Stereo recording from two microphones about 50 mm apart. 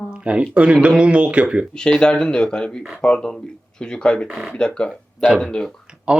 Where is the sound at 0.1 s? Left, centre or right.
Right.